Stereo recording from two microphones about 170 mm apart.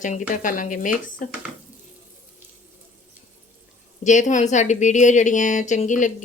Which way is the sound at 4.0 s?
45° left (ahead or behind).